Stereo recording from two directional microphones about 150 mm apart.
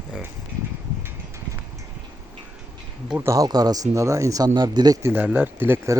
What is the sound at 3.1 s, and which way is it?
Speech, 15° right (ahead or behind).